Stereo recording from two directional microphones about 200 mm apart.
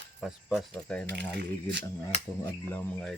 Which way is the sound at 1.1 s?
60° right (ahead or behind).